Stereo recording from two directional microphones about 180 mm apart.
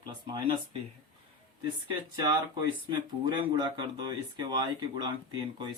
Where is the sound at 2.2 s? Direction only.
25° right (ahead or behind).